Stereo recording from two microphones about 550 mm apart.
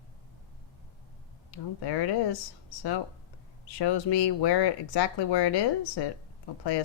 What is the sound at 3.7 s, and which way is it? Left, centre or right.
Speech, left.